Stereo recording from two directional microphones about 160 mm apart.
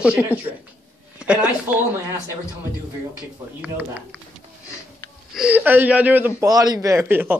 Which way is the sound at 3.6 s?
10° right (ahead or behind).